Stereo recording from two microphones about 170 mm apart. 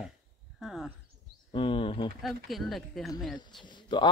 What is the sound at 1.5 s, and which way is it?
Speech, 30° left (ahead or behind).